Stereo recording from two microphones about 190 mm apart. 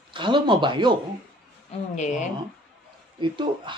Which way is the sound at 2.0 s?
40° left (ahead or behind).